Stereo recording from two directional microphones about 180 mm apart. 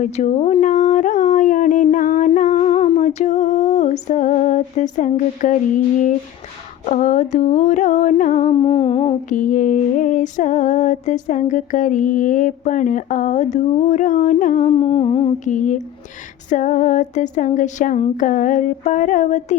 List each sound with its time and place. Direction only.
0.0 s a sound: 40° left (ahead or behind)
6.8 s female singing: 40° left (ahead or behind)
8.2 s music: 45° left (ahead or behind)
9.3 s female singing: 45° left (ahead or behind); by 15.3 s 30° left (ahead or behind)
15.4 s female singing: 45° left (ahead or behind)